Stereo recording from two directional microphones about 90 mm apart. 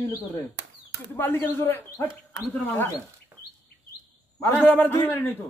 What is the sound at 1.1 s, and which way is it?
A man's voice, 25° left (ahead or behind).